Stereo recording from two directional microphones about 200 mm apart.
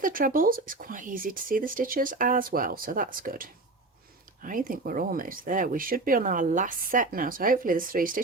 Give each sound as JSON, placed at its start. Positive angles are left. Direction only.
{"t": 0.0, "sound": "speech", "side_deg": -45}